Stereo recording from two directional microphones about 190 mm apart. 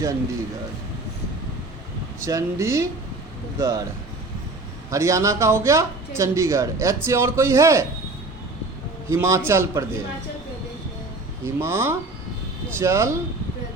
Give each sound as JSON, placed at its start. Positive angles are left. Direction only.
{"t": 2.2, "sound": "speech", "side_deg": -15}
{"t": 4.9, "sound": "speech", "side_deg": -15}
{"t": 9.0, "sound": "speech", "side_deg": -15}
{"t": 11.4, "sound": "speech", "side_deg": -15}